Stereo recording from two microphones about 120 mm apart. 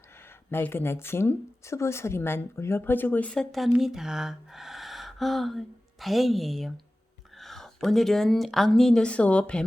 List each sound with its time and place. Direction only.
0.5 s speech: 20° left (ahead or behind)
3.7 s speech: 5° right (ahead or behind)